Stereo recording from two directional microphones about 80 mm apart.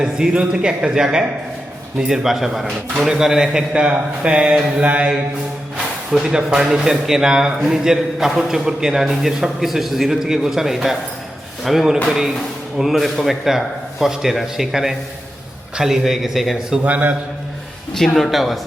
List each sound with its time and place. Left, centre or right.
0.0 s a man's voice: centre
16.8 s a man's voice: centre
17.9 s speech: centre